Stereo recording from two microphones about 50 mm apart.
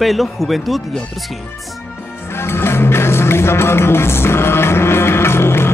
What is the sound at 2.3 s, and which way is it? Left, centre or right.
Music, left.